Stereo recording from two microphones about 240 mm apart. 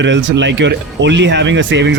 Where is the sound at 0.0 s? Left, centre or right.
Right.